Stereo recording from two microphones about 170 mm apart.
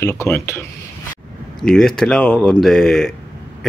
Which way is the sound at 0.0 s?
15° left (ahead or behind).